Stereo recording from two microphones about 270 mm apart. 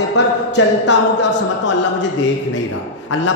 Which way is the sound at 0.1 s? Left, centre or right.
Left.